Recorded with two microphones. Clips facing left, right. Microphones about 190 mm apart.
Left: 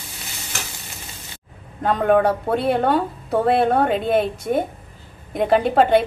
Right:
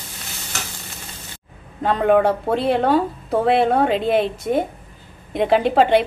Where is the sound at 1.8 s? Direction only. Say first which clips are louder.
Right 1 dB; centre (ahead or behind).